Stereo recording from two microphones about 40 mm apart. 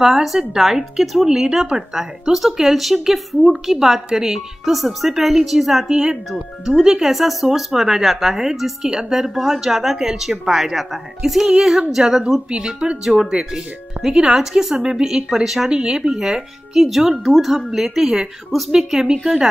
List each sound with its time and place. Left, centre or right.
0.0 s a woman's voice: centre
5.9 s a woman's voice: centre
12.4 s a woman's voice: right; by 15.7 s centre
15.7 s speech: centre
16.7 s a woman's voice: centre